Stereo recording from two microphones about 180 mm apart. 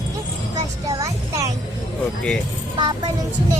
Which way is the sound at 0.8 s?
20° right (ahead or behind).